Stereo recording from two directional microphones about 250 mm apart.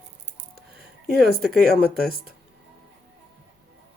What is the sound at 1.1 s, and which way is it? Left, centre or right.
Speech, right.